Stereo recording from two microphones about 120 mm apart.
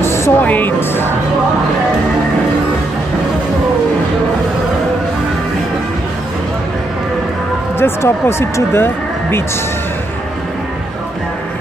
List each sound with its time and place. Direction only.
0.0 s speech: 20° left (ahead or behind)
7.8 s speech: 20° left (ahead or behind)